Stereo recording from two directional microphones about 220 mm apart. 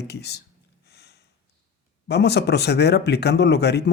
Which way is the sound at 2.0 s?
50° left (ahead or behind).